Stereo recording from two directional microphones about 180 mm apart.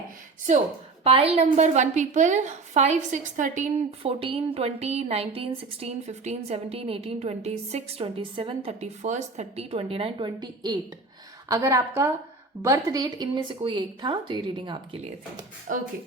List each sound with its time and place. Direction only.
1.0 s a woman's voice: 35° right (ahead or behind)
15.7 s speech: 50° right (ahead or behind)